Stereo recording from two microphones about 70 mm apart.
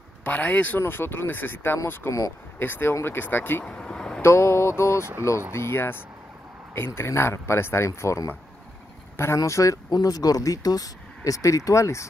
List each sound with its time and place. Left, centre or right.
0.2 s speech: left
0.7 s speech: left
3.6 s a sound: centre
4.2 s speech: left
9.4 s speech: left
9.8 s speech: left